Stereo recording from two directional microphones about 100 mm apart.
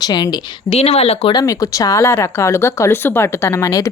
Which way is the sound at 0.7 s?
90° left.